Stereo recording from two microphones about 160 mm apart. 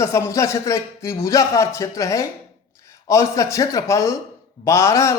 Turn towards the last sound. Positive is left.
turn(degrees=20)  # may be behind; listen again after turning